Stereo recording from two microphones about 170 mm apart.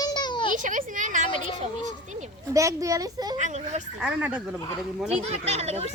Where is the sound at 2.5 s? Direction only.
20° right (ahead or behind).